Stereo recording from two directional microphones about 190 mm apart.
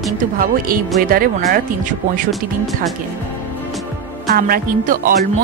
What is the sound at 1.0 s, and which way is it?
Speech, 50° right (ahead or behind).